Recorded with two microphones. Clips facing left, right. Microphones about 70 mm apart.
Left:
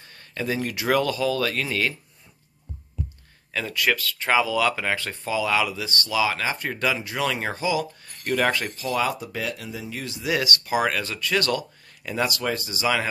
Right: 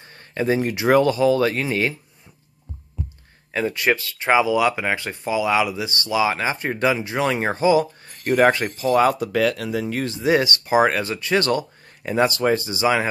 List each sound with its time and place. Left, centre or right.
0.0 s speech: right
3.5 s speech: right
9.2 s speech: right